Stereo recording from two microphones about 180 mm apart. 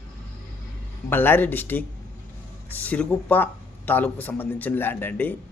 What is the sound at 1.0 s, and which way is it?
Speech, 10° left (ahead or behind).